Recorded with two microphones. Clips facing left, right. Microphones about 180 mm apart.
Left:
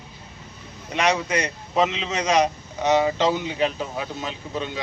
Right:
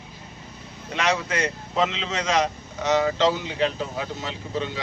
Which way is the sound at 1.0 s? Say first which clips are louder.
Left 2 dB; 15° left (ahead or behind).